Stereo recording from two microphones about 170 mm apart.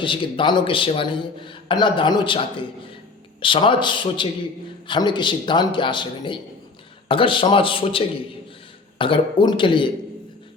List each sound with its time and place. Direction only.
0.0 s a man's voice: 30° left (ahead or behind)